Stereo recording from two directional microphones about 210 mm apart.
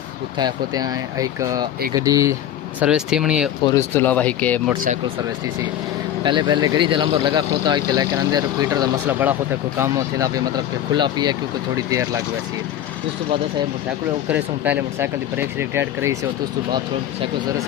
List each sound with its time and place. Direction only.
0.3 s speech: 20° right (ahead or behind)
2.8 s speech: 5° right (ahead or behind)
3.6 s speech: 20° left (ahead or behind)
3.9 s speech: 10° left (ahead or behind)
6.2 s speech: 20° right (ahead or behind)
14.3 s speech: 5° right (ahead or behind)